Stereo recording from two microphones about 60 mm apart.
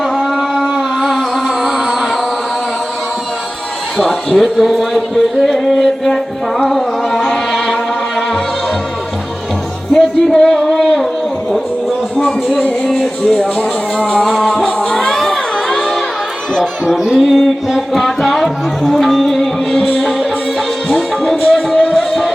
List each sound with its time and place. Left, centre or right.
0.0 s carnatic music: centre
3.9 s a sound: centre
6.7 s music: centre
9.9 s music: centre
12.1 s music: centre
12.9 s speech: centre
14.4 s music: centre
16.6 s a sound: centre
17.1 s music: centre
21.5 s music: centre